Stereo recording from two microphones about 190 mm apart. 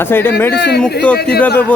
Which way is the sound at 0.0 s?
10° left (ahead or behind).